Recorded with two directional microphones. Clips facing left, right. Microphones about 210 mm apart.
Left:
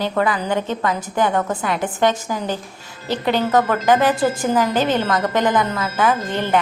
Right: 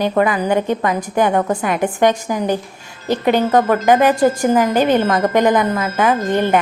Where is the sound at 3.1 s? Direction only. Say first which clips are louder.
Right 4 dB; 45° right (ahead or behind).